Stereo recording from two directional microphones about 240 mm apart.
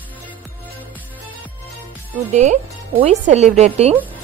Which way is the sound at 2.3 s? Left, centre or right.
Right.